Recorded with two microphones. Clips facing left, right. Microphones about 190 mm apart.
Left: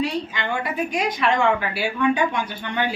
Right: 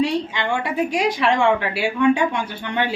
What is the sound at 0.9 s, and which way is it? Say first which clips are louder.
Speech: right 2 dB; 30° right (ahead or behind).